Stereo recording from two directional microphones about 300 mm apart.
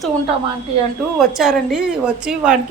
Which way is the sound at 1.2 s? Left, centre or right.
Centre.